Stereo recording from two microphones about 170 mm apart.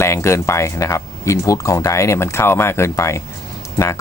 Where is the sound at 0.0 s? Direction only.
15° left (ahead or behind).